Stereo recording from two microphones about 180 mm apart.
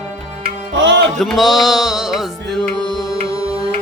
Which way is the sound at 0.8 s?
90° right.